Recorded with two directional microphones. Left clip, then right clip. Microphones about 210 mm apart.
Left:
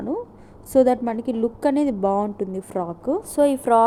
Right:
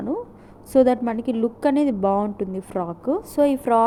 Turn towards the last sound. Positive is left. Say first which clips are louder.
# left 1 dB
turn(degrees=5)  # may be behind; listen again after turning